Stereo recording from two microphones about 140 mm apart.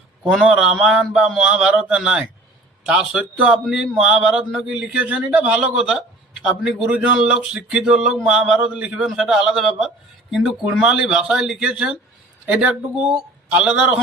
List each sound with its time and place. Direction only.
0.4 s speech: 10° right (ahead or behind)